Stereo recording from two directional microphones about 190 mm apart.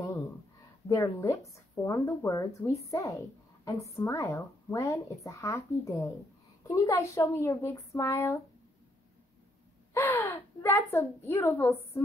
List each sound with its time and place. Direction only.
0.8 s speech: 15° left (ahead or behind)
9.9 s a woman's voice: 10° left (ahead or behind)